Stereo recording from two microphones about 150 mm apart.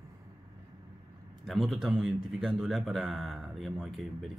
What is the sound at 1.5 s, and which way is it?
A man's voice, centre (ahead or behind).